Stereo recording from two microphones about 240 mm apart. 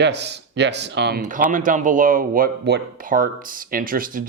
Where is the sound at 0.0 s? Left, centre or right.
Right.